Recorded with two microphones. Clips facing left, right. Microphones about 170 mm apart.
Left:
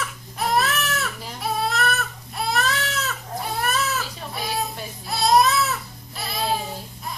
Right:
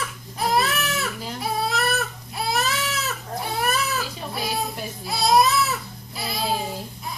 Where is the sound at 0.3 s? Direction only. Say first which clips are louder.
Even; centre (ahead or behind).